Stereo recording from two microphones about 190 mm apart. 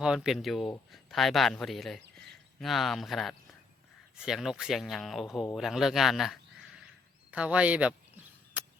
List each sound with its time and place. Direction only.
0.0 s speech: 5° right (ahead or behind)
8.6 s chop: 10° right (ahead or behind)